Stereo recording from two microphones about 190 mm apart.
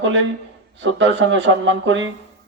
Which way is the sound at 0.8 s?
75° right (ahead or behind).